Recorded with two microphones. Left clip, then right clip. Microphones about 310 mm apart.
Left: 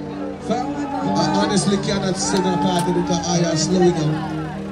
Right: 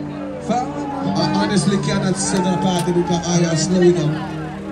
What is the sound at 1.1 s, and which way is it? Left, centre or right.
Music, right.